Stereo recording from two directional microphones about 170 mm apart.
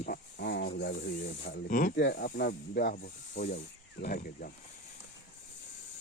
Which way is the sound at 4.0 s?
60° left (ahead or behind).